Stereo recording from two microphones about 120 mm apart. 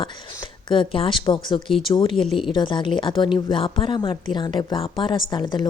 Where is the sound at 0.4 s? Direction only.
45° left (ahead or behind).